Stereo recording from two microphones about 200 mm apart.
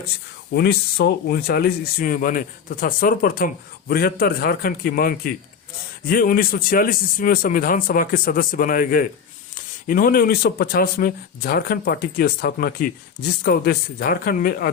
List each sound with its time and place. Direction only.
0.5 s speech: 55° left (ahead or behind)